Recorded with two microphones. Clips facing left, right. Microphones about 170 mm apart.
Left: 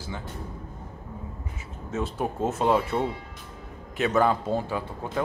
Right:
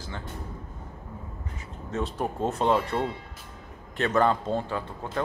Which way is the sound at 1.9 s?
5° left (ahead or behind).